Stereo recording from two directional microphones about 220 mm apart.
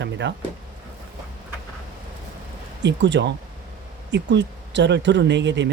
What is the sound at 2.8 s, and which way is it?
Speech, 50° right (ahead or behind).